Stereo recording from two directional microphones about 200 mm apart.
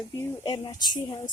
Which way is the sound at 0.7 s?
20° left (ahead or behind).